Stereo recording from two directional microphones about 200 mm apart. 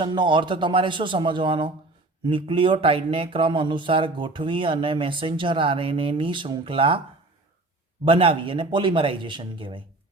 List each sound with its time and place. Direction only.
0.0 s speech: 25° right (ahead or behind)
8.0 s speech: 25° right (ahead or behind)